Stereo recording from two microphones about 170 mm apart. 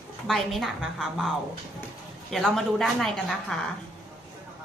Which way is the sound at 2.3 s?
Centre (ahead or behind).